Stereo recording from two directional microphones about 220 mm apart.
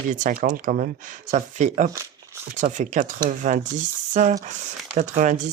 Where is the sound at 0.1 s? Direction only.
35° right (ahead or behind).